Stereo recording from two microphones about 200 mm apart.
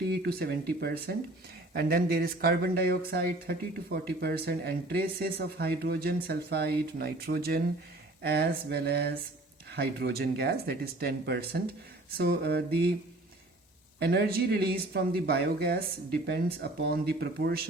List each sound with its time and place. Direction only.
0.1 s speech: 50° right (ahead or behind)
14.0 s speech: 55° right (ahead or behind)